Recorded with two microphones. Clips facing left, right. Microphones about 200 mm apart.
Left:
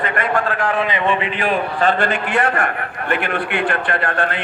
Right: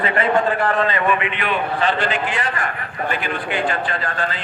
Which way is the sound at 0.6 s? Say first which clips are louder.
Even; centre (ahead or behind).